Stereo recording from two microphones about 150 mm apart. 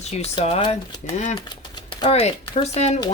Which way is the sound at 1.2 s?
50° left (ahead or behind).